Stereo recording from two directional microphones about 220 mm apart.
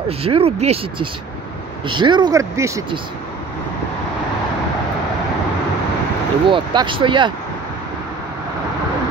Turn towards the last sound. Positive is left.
turn(degrees=-20)  # may be behind; listen again after turning